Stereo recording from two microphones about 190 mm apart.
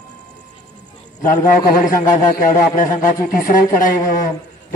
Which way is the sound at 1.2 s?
40° left (ahead or behind).